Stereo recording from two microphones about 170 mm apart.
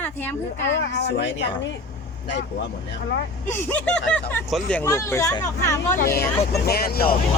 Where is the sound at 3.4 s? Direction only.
15° left (ahead or behind).